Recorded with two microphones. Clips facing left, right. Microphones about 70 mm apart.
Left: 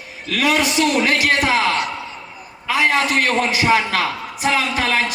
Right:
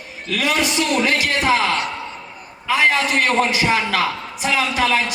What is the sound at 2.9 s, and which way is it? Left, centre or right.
A man's voice, left.